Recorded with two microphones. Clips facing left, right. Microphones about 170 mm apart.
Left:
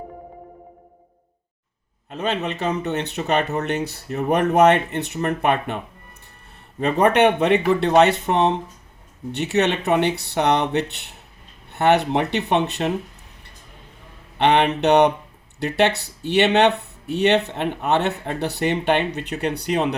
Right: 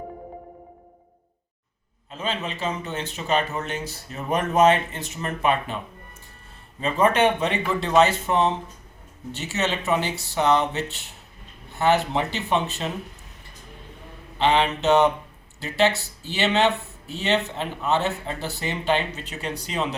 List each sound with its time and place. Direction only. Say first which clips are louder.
2.0 s speech: left 5 dB; 65° left (ahead or behind)
14.3 s speech: left 3 dB; 65° left (ahead or behind)